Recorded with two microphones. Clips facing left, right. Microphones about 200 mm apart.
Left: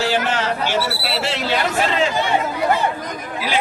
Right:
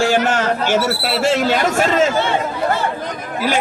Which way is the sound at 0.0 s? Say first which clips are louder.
Right 4 dB; 50° right (ahead or behind).